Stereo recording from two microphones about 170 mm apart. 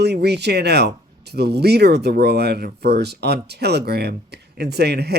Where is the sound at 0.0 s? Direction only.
75° right (ahead or behind).